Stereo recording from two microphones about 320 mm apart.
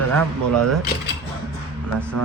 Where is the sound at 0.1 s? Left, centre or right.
Centre.